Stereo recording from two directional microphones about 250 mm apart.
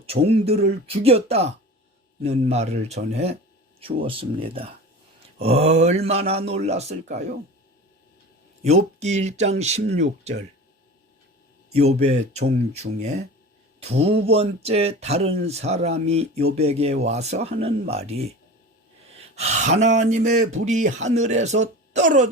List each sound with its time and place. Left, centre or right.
0.0 s speech: right
8.6 s speech: right
11.7 s speech: right
19.4 s speech: right